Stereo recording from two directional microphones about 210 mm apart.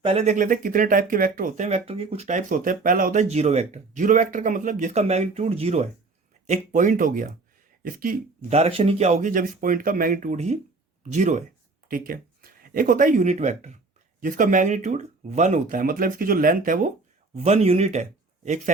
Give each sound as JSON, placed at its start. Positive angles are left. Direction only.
{"t": 0.0, "sound": "speech", "side_deg": -30}
{"t": 8.4, "sound": "speech", "side_deg": -30}